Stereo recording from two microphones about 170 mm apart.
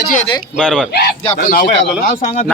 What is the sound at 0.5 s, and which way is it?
Speech, 5° right (ahead or behind).